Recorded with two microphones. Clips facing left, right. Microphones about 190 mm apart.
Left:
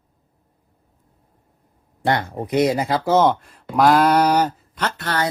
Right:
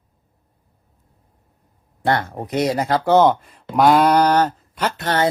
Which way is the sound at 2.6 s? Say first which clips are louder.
Even; 10° left (ahead or behind).